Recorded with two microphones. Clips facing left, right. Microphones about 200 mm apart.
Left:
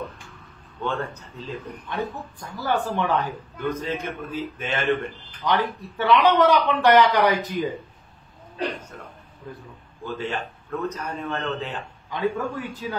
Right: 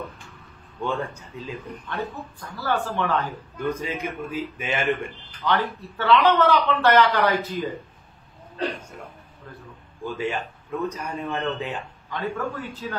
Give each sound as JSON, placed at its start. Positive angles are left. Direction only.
{"t": 0.8, "sound": "a man's voice", "side_deg": -15}
{"t": 1.9, "sound": "a man's voice", "side_deg": 15}
{"t": 3.6, "sound": "a man's voice", "side_deg": -10}
{"t": 5.4, "sound": "a man's voice", "side_deg": 15}
{"t": 10.1, "sound": "a man's voice", "side_deg": -10}
{"t": 12.1, "sound": "a man's voice", "side_deg": 15}